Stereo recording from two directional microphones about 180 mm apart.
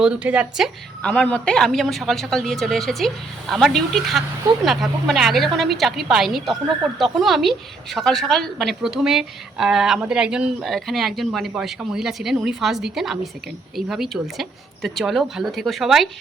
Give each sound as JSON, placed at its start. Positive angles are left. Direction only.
{"t": 0.0, "sound": "a woman's voice", "side_deg": -5}